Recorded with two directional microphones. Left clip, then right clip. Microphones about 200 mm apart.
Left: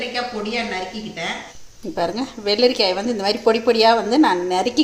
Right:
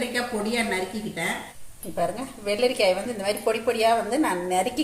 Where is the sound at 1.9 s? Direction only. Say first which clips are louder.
Left 4 dB; 40° left (ahead or behind).